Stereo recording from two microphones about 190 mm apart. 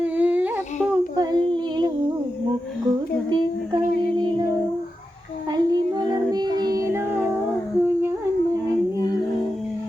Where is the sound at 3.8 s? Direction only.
55° left (ahead or behind).